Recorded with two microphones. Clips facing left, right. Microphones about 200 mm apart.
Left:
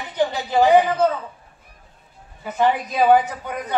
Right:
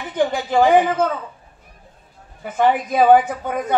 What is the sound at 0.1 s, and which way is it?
A woman's voice, 50° right (ahead or behind).